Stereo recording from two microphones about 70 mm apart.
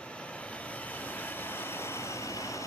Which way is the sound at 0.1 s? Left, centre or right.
Centre.